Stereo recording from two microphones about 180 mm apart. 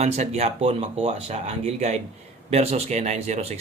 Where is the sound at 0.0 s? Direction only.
35° right (ahead or behind).